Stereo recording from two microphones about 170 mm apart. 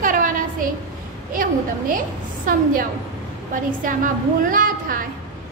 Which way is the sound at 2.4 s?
55° right (ahead or behind).